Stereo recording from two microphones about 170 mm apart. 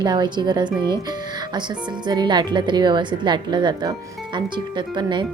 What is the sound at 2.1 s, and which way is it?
A woman's voice, 25° right (ahead or behind).